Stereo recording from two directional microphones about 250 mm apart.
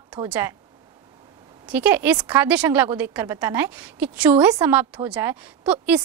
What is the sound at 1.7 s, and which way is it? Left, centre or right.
A woman's voice, centre.